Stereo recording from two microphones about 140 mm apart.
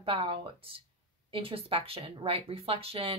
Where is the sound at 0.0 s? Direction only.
40° right (ahead or behind).